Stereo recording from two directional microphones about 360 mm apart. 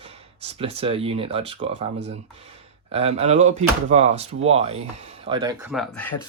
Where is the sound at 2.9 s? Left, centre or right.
Centre.